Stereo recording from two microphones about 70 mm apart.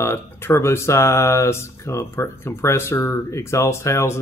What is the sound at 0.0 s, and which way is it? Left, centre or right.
Speech, left.